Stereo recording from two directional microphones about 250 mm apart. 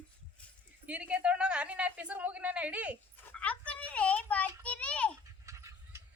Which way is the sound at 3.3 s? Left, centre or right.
Centre.